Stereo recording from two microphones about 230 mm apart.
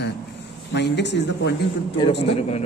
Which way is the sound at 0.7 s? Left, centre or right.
Left.